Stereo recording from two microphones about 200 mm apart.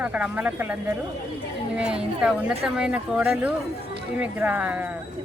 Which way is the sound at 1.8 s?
5° right (ahead or behind).